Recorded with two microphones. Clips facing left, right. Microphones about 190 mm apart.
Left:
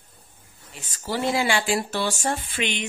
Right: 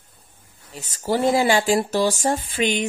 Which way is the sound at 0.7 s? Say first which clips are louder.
Right 6 dB; 40° right (ahead or behind).